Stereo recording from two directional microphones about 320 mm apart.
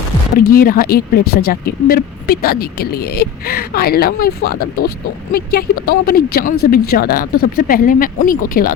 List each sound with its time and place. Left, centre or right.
0.5 s speech: left
1.2 s speech: left
1.5 s speech: left